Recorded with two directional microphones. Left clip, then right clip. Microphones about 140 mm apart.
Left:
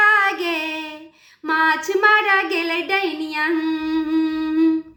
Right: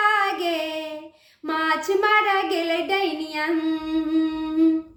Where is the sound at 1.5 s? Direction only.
40° right (ahead or behind).